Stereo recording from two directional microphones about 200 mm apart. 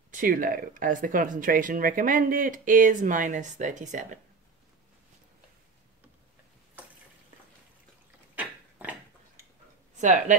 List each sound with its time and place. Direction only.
0.1 s speech: 45° right (ahead or behind)
8.4 s a sound: 5° right (ahead or behind)
9.9 s speech: 40° right (ahead or behind)